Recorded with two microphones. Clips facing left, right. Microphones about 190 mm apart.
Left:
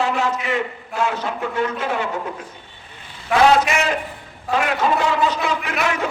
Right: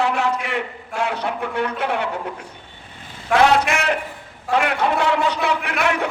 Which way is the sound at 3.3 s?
Centre (ahead or behind).